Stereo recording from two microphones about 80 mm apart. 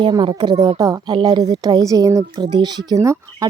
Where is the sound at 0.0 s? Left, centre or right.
Right.